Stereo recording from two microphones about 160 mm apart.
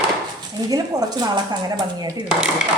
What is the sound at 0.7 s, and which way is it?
Speech, 25° right (ahead or behind).